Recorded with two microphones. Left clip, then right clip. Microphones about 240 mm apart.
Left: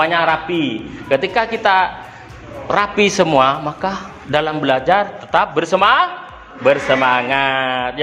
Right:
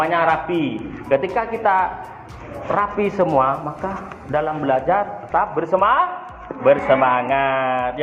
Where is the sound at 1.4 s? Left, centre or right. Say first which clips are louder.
Left 4 dB; left.